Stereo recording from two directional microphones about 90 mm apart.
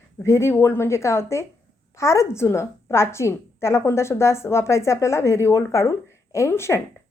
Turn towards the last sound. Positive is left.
turn(degrees=30)  # may be behind; listen again after turning